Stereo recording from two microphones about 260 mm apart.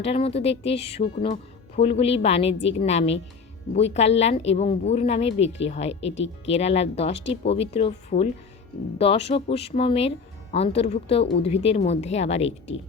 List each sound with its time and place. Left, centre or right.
0.0 s speech: left
6.1 s speech: left
6.5 s speech: left